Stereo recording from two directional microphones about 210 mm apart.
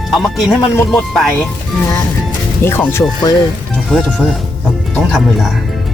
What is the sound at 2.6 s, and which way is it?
Speech, 10° left (ahead or behind).